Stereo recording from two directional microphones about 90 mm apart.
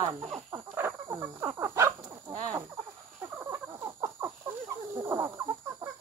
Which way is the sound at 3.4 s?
35° right (ahead or behind).